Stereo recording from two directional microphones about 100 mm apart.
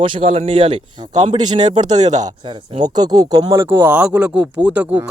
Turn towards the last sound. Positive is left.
turn(degrees=-15)  # may be behind; listen again after turning